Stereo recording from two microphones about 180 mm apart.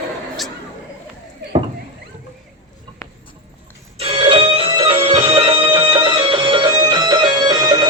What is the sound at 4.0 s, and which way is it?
Music, 30° right (ahead or behind).